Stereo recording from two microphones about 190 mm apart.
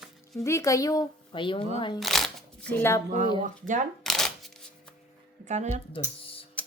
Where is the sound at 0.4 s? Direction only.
15° left (ahead or behind).